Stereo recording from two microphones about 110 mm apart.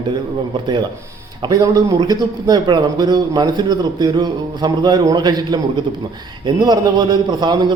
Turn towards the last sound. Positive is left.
turn(degrees=-40)  # may be behind; listen again after turning